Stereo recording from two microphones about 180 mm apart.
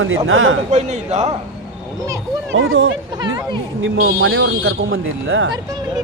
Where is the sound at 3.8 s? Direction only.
90° right.